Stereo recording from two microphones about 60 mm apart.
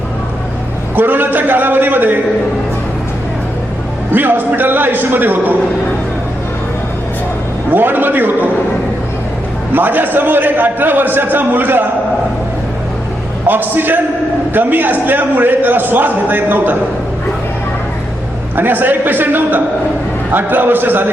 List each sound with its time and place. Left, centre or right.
0.9 s a man's voice: right
4.1 s a man's voice: right
7.7 s a man's voice: right
9.7 s a man's voice: right
13.5 s a man's voice: right
18.5 s a man's voice: right